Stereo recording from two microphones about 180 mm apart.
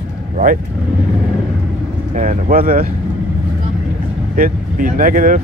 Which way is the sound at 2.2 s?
50° right (ahead or behind).